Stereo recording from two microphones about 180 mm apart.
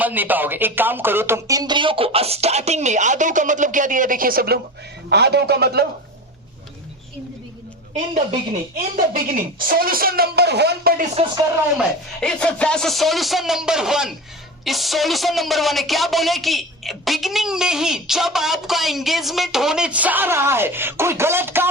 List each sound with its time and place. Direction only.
0.0 s speech: 10° right (ahead or behind); by 5.8 s 65° right (ahead or behind)
8.7 s speech: 50° right (ahead or behind)
11.8 s speech: 5° left (ahead or behind); by 21.7 s 10° right (ahead or behind)